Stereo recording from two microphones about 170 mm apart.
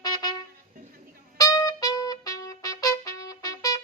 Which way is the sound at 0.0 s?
25° left (ahead or behind).